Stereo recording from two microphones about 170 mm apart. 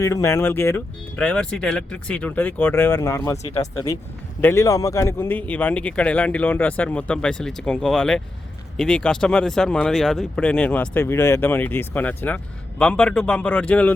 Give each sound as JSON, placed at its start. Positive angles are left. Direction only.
{"t": 0.0, "sound": "speech", "side_deg": 15}